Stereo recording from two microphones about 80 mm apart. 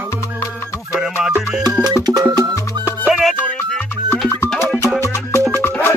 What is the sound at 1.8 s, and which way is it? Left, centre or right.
Music, right.